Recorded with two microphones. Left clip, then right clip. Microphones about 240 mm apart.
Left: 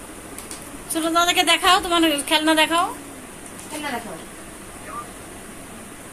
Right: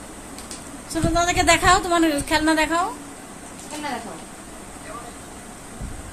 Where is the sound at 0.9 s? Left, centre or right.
Centre.